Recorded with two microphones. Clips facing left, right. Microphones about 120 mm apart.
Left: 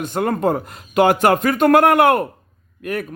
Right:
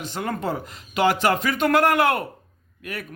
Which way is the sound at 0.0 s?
55° left (ahead or behind).